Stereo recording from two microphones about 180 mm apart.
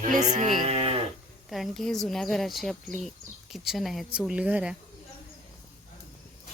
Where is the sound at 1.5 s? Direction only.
Centre (ahead or behind).